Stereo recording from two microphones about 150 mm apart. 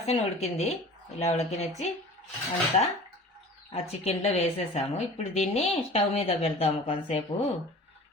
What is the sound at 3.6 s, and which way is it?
Speech, 40° left (ahead or behind).